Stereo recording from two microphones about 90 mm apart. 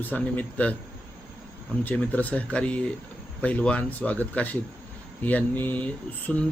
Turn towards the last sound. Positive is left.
turn(degrees=15)  # may be behind; listen again after turning